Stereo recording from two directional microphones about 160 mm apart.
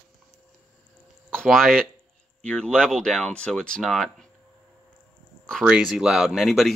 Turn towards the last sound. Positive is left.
turn(degrees=0)  # may be behind; listen again after turning